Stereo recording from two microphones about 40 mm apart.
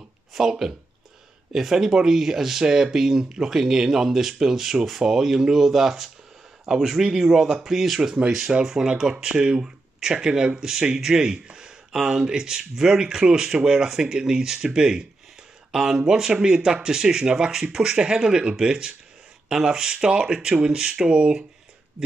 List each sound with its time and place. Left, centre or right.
0.3 s speech: centre
8.6 s speech: centre